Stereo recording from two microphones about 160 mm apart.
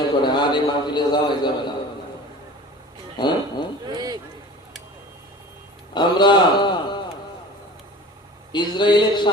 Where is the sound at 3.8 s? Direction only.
25° right (ahead or behind).